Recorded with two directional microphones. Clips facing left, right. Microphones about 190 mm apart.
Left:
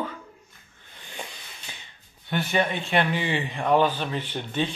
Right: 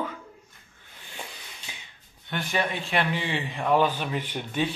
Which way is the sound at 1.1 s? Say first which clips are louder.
Left 2 dB; centre (ahead or behind).